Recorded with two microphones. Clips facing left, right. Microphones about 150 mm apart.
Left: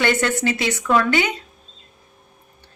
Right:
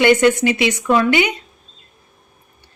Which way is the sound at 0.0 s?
15° right (ahead or behind).